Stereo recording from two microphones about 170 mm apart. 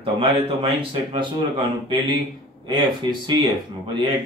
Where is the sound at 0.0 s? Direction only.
30° right (ahead or behind).